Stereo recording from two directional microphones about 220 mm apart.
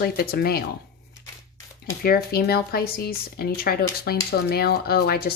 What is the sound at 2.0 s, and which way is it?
Speech, 45° left (ahead or behind).